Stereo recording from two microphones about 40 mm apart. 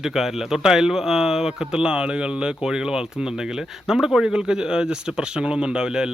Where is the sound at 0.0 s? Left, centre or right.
Centre.